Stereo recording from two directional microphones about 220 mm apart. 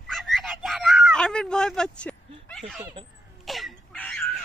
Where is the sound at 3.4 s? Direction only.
Centre (ahead or behind).